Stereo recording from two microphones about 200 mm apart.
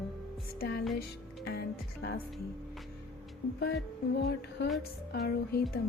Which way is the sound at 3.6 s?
55° left (ahead or behind).